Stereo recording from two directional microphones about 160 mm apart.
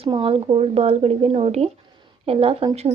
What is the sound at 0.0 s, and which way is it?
Speech, 35° right (ahead or behind).